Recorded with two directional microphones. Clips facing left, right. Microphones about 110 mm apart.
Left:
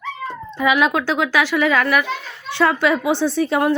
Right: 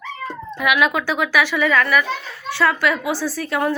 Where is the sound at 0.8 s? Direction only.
20° left (ahead or behind).